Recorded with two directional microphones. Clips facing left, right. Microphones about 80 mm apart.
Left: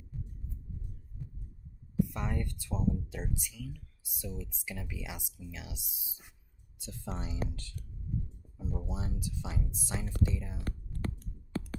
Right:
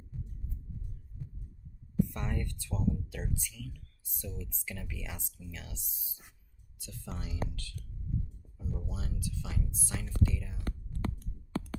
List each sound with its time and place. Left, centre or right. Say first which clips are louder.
2.0 s speech: left 1 dB; centre
6.7 s speech: left 3 dB; left